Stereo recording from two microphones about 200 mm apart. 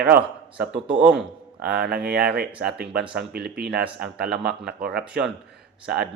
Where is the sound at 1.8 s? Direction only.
50° right (ahead or behind).